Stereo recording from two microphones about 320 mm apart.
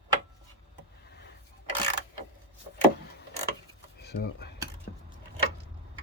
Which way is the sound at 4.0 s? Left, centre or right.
Left.